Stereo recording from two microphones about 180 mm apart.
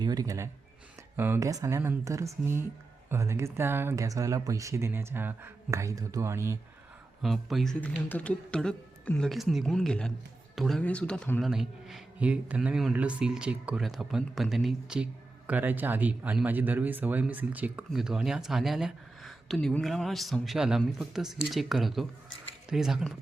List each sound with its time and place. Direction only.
0.0 s speech: 20° right (ahead or behind)
7.2 s speech: centre (ahead or behind)